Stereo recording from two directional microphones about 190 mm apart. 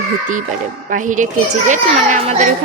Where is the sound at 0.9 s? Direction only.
45° right (ahead or behind).